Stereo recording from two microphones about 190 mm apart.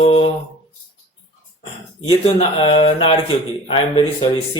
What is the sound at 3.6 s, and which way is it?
Speech, 30° left (ahead or behind).